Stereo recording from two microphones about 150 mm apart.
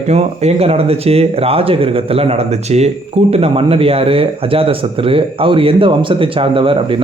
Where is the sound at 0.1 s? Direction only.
45° right (ahead or behind).